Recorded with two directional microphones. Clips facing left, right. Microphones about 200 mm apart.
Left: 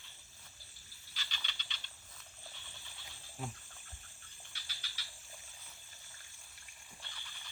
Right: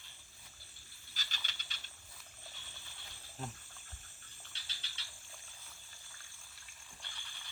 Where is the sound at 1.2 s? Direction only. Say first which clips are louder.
Left 1 dB; 45° right (ahead or behind).